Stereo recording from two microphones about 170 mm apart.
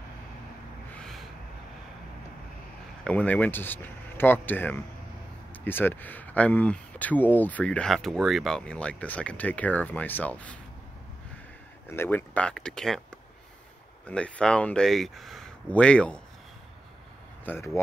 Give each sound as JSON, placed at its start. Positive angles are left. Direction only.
{"t": 0.9, "sound": "a sound", "side_deg": 0}
{"t": 3.0, "sound": "speech", "side_deg": 10}
{"t": 11.9, "sound": "speech", "side_deg": 15}